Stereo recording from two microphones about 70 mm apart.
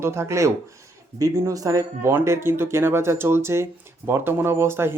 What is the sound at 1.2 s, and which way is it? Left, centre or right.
Speech, right.